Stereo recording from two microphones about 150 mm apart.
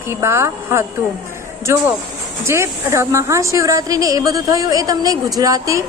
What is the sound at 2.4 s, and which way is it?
A woman's voice, 20° right (ahead or behind).